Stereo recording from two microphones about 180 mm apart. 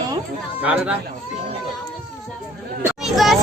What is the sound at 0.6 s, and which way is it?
Speech, 5° right (ahead or behind).